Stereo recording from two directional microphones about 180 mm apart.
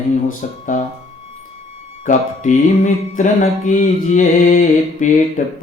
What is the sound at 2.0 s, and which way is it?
Music, 45° left (ahead or behind).